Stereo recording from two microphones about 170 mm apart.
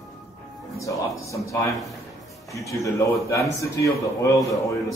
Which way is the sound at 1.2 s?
20° left (ahead or behind).